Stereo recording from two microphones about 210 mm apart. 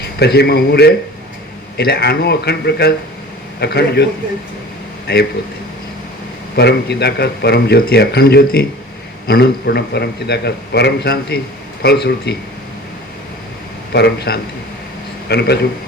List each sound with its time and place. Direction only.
0.2 s a man's voice: 50° left (ahead or behind)
6.6 s a man's voice: 50° left (ahead or behind)
13.9 s a man's voice: 50° left (ahead or behind)